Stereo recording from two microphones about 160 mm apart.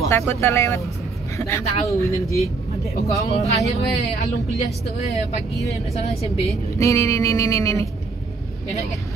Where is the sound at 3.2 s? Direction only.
40° left (ahead or behind).